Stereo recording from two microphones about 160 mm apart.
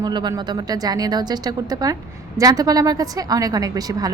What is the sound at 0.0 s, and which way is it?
A woman's voice, 25° right (ahead or behind).